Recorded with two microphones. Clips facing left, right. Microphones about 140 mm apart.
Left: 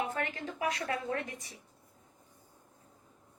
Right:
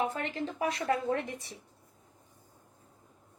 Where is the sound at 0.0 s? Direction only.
30° right (ahead or behind).